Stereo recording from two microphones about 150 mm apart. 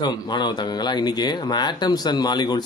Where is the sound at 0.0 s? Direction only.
30° left (ahead or behind).